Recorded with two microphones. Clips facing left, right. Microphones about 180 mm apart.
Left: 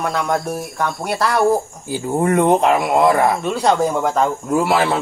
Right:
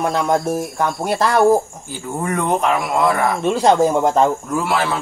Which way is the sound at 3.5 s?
25° right (ahead or behind).